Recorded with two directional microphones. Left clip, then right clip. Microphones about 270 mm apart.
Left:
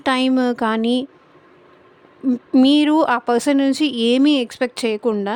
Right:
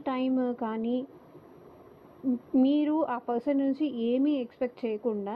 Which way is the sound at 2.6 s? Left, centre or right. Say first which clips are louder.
Left 12 dB; left.